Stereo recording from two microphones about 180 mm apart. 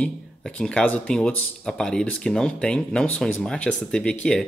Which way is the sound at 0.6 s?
5° left (ahead or behind).